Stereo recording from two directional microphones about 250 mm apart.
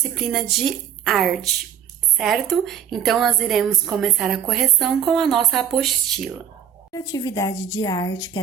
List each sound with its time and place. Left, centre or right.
0.1 s a woman's voice: centre
6.9 s speech: centre